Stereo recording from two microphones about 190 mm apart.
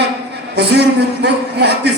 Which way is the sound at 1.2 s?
60° right (ahead or behind).